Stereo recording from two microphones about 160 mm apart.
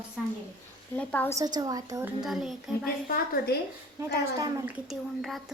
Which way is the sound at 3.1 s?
75° left (ahead or behind).